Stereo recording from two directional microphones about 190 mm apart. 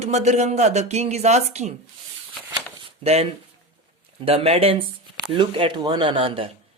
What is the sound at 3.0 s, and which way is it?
Speech, 35° right (ahead or behind).